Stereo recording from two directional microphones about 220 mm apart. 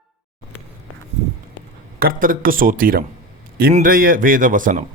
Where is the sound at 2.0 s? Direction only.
40° right (ahead or behind).